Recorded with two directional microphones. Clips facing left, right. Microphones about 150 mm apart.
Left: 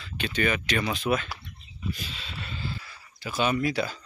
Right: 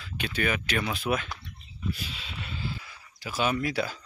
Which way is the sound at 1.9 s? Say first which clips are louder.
Even; 5° right (ahead or behind).